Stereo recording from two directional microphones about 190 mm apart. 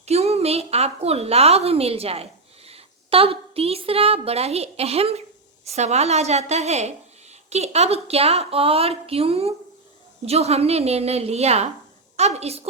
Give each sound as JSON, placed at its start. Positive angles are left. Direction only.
{"t": 0.0, "sound": "a woman's voice", "side_deg": -35}